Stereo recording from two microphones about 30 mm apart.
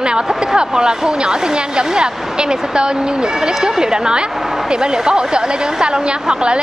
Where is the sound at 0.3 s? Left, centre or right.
Centre.